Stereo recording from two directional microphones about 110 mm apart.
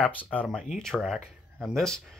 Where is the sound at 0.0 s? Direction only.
15° left (ahead or behind).